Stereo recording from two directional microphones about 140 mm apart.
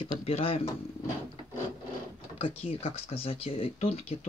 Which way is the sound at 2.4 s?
45° left (ahead or behind).